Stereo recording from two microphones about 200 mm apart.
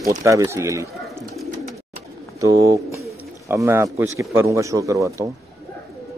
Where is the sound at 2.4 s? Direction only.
15° right (ahead or behind).